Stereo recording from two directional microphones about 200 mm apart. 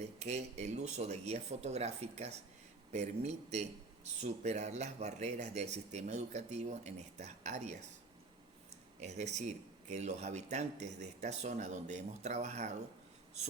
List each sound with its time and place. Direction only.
0.0 s speech: 35° right (ahead or behind)